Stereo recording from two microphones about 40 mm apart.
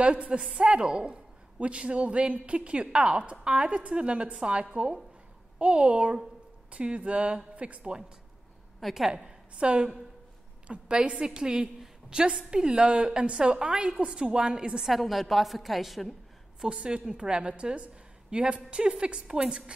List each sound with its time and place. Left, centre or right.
0.0 s a woman's voice: right
8.8 s a woman's voice: centre
9.1 s a woman's voice: right
14.8 s a woman's voice: centre
16.6 s a woman's voice: right